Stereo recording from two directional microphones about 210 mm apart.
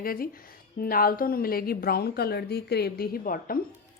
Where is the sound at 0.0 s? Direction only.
45° left (ahead or behind).